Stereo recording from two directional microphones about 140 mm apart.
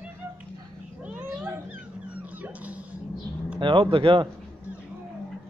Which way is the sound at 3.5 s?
35° right (ahead or behind).